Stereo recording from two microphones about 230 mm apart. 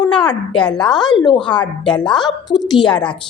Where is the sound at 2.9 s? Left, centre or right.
Centre.